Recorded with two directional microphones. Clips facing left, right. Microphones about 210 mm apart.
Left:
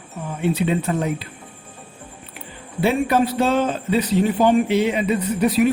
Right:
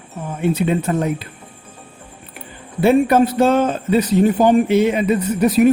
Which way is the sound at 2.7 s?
50° right (ahead or behind).